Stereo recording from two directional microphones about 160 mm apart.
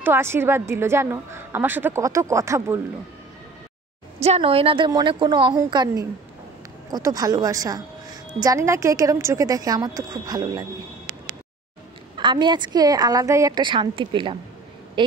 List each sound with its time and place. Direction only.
0.0 s a woman's voice: 15° right (ahead or behind)
4.2 s a woman's voice: 40° right (ahead or behind); by 10.6 s 25° right (ahead or behind)
12.2 s a woman's voice: 30° right (ahead or behind)